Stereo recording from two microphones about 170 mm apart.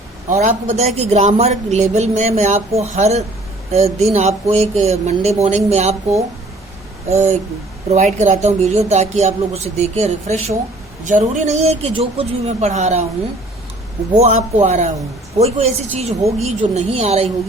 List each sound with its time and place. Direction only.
0.3 s a man's voice: 45° right (ahead or behind)
14.1 s speech: 40° right (ahead or behind)